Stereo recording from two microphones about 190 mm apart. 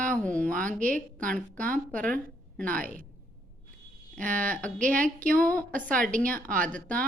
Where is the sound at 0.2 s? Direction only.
5° left (ahead or behind).